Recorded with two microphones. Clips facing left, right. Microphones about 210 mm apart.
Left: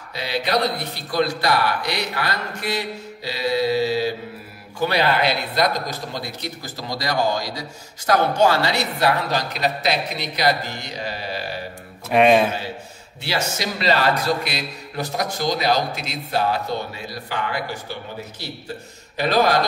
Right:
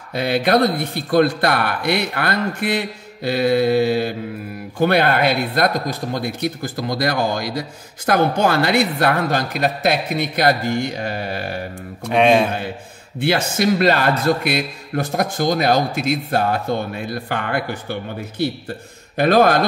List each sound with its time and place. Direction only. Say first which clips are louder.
0.1 s a man's voice: right 6 dB; 55° right (ahead or behind)
12.1 s speech: right 1 dB; centre (ahead or behind)
13.2 s a man's voice: right 7 dB; 55° right (ahead or behind)